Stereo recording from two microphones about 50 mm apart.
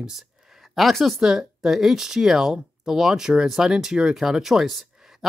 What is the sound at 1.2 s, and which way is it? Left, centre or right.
Speech, centre.